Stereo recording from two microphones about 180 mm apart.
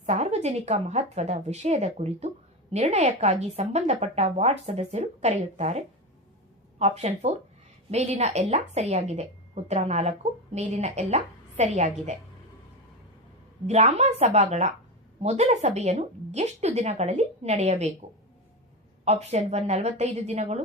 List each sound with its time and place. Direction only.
0.0 s speech: 40° right (ahead or behind)
13.7 s speech: 40° right (ahead or behind)
19.0 s speech: 35° right (ahead or behind)